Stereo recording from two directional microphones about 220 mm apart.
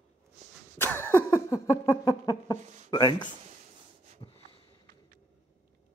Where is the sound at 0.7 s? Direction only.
10° left (ahead or behind).